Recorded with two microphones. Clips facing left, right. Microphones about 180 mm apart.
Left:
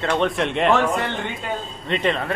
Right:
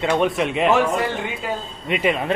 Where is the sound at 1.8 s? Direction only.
10° right (ahead or behind).